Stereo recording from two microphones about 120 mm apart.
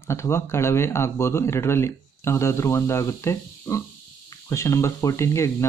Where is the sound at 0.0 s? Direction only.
25° left (ahead or behind).